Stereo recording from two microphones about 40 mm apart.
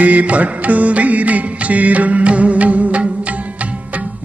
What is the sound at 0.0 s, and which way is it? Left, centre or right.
Music, right.